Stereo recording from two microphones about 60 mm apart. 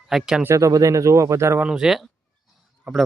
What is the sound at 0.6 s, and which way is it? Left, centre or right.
Speech, right.